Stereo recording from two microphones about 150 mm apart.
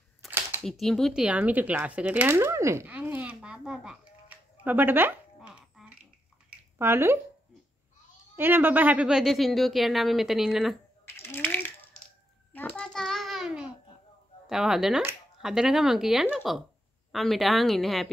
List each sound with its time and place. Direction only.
0.3 s a sound: 15° right (ahead or behind)
0.7 s speech: centre (ahead or behind); by 7.2 s 15° right (ahead or behind)
8.4 s a woman's voice: 15° right (ahead or behind)
11.1 s ratchet: 15° left (ahead or behind)
12.5 s a sound: 10° left (ahead or behind)
14.5 s a woman's voice: centre (ahead or behind)